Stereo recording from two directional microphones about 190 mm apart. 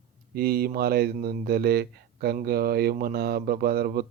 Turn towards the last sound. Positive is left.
turn(degrees=-55)  # may be behind; listen again after turning